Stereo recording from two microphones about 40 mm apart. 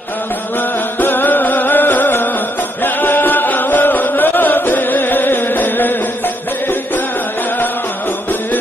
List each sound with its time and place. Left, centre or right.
0.9 s music: left
2.8 s chant: left